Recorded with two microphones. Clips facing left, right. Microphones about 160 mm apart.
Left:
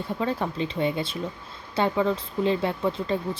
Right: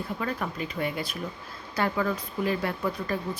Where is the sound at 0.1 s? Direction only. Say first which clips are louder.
Left 7 dB; 25° left (ahead or behind).